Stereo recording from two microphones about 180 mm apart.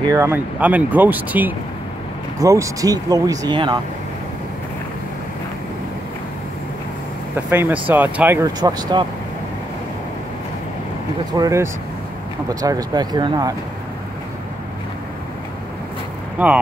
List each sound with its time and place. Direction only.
0.1 s speech: 15° right (ahead or behind)
7.3 s speech: 10° right (ahead or behind)
8.5 s speech: 25° right (ahead or behind)
11.3 s speech: 20° right (ahead or behind)
16.4 s speech: 10° right (ahead or behind)